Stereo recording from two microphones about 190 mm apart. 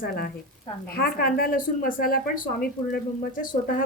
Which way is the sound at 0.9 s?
50° left (ahead or behind).